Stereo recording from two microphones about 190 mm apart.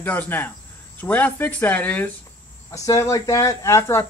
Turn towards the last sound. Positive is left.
turn(degrees=15)  # may be behind; listen again after turning